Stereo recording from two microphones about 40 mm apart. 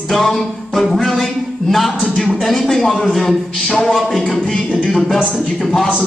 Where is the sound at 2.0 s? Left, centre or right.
Centre.